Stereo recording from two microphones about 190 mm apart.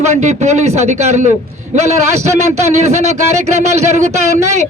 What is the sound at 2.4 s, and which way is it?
A man's voice, 35° right (ahead or behind).